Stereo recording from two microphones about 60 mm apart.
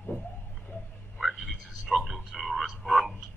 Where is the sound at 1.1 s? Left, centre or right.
Centre.